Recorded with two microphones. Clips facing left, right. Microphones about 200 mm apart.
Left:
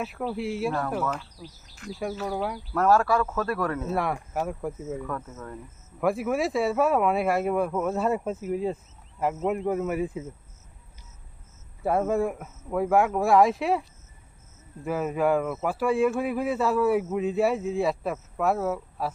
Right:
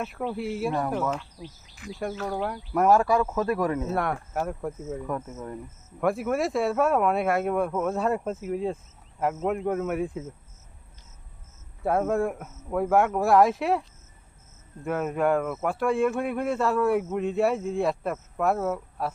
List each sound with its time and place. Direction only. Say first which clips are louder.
0.0 s speech: even; centre (ahead or behind)
1.8 s speech: even; centre (ahead or behind)
2.7 s speech: right 1 dB; 15° right (ahead or behind)
3.8 s speech: even; centre (ahead or behind)
5.0 s speech: right 3 dB; 20° right (ahead or behind)
6.0 s speech: even; centre (ahead or behind)
11.8 s speech: even; centre (ahead or behind)
14.8 s speech: even; centre (ahead or behind)